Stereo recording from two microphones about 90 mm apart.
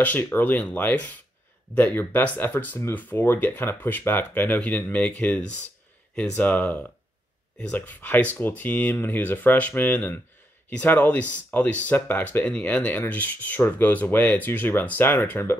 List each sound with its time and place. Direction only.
0.0 s speech: 20° left (ahead or behind)